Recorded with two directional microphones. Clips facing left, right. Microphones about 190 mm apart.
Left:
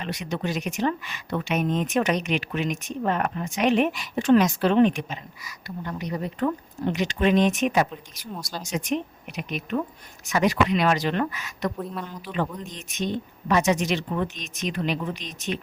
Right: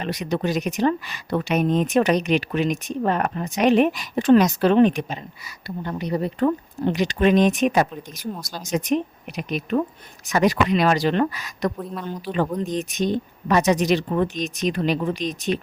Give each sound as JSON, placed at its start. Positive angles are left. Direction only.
{"t": 0.0, "sound": "speech", "side_deg": -40}